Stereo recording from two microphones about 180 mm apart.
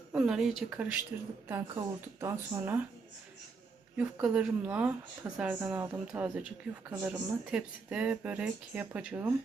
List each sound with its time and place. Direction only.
0.1 s speech: 5° right (ahead or behind)
3.9 s speech: 5° right (ahead or behind)